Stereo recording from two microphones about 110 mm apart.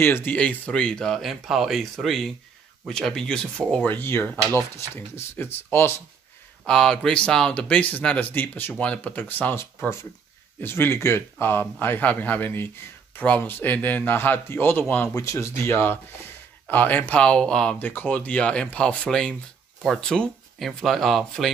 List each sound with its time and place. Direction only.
0.0 s speech: 20° left (ahead or behind)
6.6 s speech: 5° left (ahead or behind)
15.1 s speech: 25° left (ahead or behind); by 21.5 s centre (ahead or behind)